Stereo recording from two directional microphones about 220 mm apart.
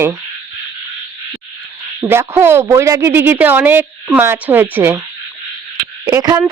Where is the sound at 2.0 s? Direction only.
10° right (ahead or behind).